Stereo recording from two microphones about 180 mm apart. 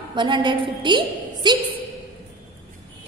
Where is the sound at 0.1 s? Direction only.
25° right (ahead or behind).